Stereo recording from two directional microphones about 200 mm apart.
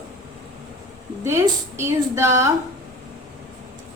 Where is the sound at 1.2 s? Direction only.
10° right (ahead or behind).